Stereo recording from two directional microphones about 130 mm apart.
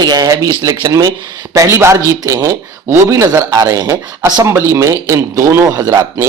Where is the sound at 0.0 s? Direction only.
30° right (ahead or behind).